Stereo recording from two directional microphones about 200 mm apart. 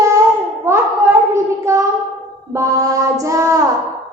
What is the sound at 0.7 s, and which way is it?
Hands, 10° right (ahead or behind).